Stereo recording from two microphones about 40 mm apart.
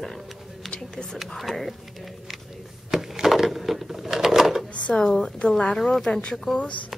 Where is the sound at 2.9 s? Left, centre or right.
Centre.